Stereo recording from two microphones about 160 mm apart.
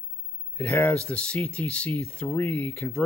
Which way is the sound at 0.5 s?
10° left (ahead or behind).